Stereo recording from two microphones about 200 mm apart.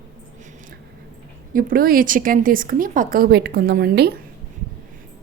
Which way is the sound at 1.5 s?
45° right (ahead or behind).